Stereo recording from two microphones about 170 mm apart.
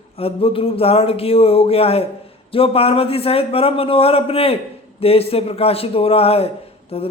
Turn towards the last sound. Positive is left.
turn(degrees=35)  # may be behind; listen again after turning